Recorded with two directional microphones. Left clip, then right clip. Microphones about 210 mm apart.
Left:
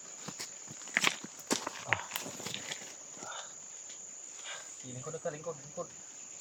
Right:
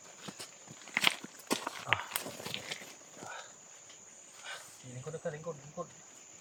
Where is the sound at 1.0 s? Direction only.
5° left (ahead or behind).